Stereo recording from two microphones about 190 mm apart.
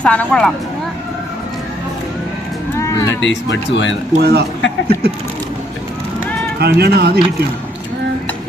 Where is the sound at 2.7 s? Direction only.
15° left (ahead or behind).